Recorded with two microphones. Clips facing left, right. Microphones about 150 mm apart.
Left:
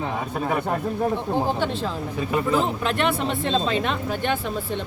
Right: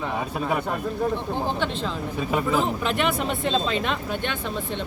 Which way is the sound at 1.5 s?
10° left (ahead or behind).